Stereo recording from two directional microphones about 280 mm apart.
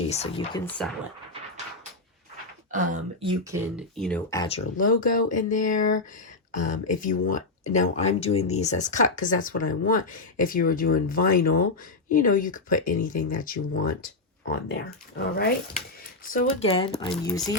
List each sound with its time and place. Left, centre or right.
0.1 s speech: left
0.6 s speech: centre
2.7 s speech: right
3.8 s speech: centre; by 15.3 s left
16.3 s speech: left
17.1 s speech: centre